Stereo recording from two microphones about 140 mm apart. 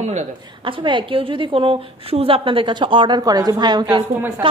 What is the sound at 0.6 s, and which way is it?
A woman's voice, 35° right (ahead or behind).